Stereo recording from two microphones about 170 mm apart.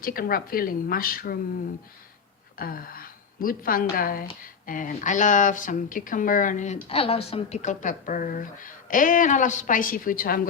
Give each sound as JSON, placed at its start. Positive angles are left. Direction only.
{"t": 0.0, "sound": "speech", "side_deg": 60}
{"t": 2.6, "sound": "a woman's voice", "side_deg": 60}
{"t": 6.8, "sound": "a woman's voice", "side_deg": 35}